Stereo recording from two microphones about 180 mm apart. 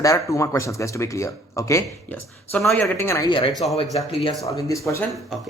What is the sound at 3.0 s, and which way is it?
Speech, 15° left (ahead or behind).